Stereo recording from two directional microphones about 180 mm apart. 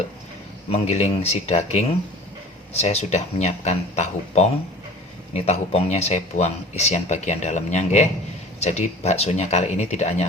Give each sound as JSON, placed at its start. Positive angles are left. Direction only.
{"t": 0.7, "sound": "speech", "side_deg": 35}